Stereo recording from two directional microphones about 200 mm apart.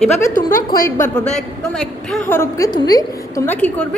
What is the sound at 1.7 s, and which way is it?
A woman's voice, 5° left (ahead or behind).